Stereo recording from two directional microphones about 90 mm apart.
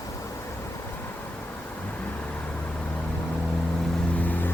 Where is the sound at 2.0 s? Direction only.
15° left (ahead or behind).